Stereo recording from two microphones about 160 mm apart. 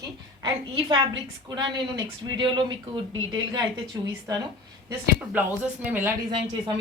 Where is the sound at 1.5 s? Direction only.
25° right (ahead or behind).